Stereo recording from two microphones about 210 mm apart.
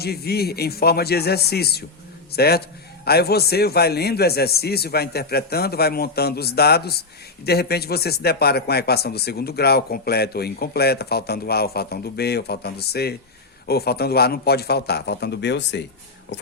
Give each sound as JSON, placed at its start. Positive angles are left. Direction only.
{"t": 0.0, "sound": "a man's voice", "side_deg": 50}